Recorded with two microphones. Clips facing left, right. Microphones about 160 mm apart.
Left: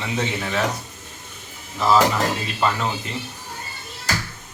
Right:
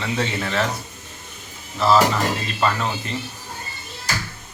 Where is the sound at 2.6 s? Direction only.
10° left (ahead or behind).